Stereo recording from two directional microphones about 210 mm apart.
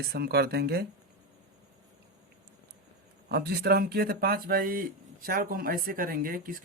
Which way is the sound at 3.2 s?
50° right (ahead or behind).